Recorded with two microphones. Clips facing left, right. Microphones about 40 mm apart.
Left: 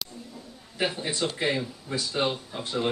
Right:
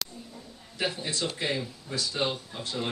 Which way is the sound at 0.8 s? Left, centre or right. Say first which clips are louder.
Left 3 dB; centre.